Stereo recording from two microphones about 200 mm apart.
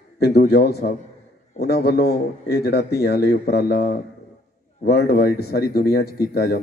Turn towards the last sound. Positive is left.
turn(degrees=50)  # may be behind; listen again after turning